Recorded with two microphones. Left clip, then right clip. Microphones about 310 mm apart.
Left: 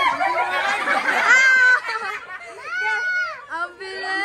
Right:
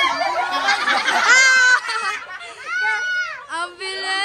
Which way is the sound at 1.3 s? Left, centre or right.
Centre.